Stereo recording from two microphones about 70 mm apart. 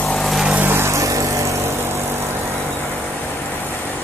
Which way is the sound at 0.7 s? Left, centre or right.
Right.